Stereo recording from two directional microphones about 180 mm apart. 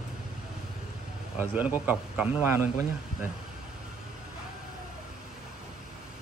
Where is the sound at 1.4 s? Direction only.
10° right (ahead or behind).